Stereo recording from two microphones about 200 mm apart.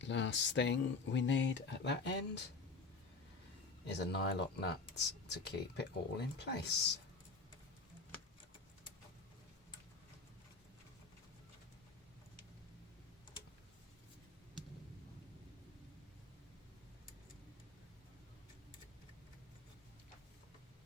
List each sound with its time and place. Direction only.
0.0 s speech: 65° left (ahead or behind)
3.8 s speech: 55° left (ahead or behind)